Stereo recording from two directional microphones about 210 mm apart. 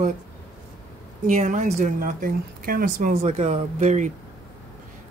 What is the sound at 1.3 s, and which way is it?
Speech, 35° right (ahead or behind).